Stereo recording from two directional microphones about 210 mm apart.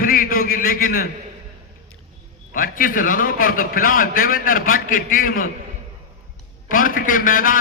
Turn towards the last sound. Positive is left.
turn(degrees=40)  # may be behind; listen again after turning